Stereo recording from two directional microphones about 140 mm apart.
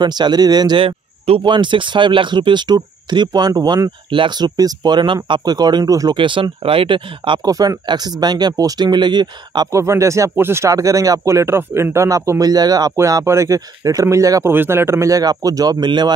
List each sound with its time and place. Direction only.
0.0 s speech: 30° right (ahead or behind)